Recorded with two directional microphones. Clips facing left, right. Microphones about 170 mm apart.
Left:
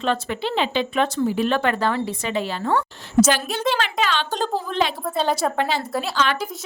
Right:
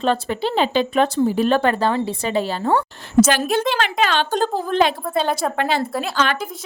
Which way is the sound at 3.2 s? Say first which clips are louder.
Right 3 dB; 55° right (ahead or behind).